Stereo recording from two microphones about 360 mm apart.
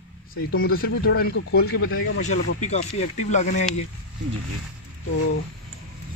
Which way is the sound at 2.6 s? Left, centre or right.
Centre.